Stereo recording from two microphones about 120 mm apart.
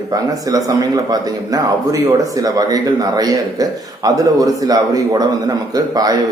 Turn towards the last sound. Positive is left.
turn(degrees=-30)  # may be behind; listen again after turning